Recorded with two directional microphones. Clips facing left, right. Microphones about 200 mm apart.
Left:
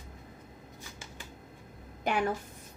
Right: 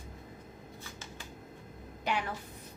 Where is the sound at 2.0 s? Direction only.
50° left (ahead or behind).